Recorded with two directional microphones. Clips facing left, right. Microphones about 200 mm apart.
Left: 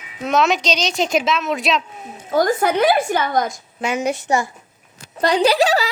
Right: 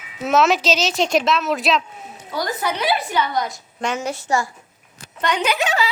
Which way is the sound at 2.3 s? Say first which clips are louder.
Left 8 dB; 50° left (ahead or behind).